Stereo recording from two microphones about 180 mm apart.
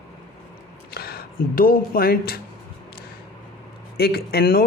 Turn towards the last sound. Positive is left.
turn(degrees=55)  # may be behind; listen again after turning